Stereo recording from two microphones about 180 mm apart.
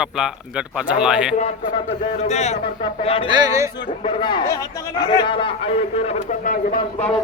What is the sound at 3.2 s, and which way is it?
Speech, 25° right (ahead or behind).